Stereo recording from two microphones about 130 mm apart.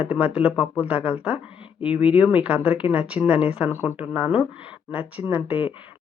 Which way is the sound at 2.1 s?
15° right (ahead or behind).